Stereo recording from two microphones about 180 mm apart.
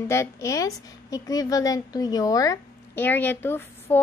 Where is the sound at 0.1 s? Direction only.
15° left (ahead or behind).